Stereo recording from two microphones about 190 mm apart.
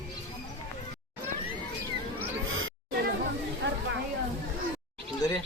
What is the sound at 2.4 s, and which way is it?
Music, 90° right.